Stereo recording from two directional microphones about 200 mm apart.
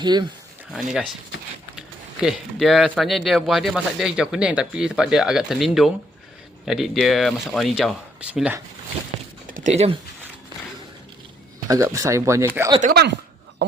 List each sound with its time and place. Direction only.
0.0 s speech: 20° right (ahead or behind)
0.7 s speech: 5° right (ahead or behind)
2.2 s speech: centre (ahead or behind)
9.5 s speech: 40° right (ahead or behind)
11.7 s speech: 15° right (ahead or behind)
12.8 s speech: 50° right (ahead or behind)